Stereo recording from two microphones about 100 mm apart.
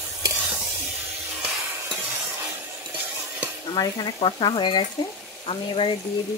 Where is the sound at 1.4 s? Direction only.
20° right (ahead or behind).